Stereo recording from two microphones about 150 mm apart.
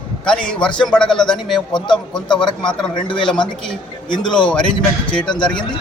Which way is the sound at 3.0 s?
30° left (ahead or behind).